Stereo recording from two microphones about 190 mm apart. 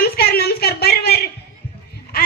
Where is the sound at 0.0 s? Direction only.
55° left (ahead or behind).